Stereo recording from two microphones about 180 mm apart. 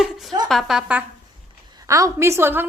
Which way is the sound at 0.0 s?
Centre (ahead or behind).